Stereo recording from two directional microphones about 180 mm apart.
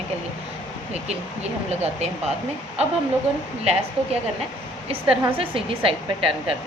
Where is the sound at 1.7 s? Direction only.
40° right (ahead or behind).